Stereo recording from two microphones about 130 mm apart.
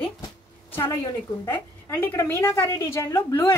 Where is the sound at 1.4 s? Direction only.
15° left (ahead or behind).